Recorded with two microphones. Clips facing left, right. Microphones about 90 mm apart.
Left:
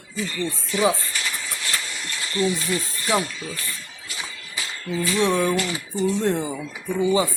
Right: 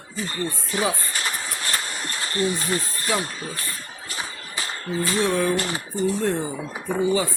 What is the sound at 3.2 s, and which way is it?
Speech, 40° right (ahead or behind).